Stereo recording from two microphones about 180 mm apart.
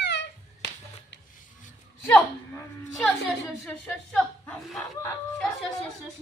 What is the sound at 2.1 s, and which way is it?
Speech, 5° left (ahead or behind).